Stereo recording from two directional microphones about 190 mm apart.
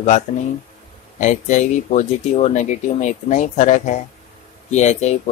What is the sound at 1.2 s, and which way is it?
Speech, 40° left (ahead or behind).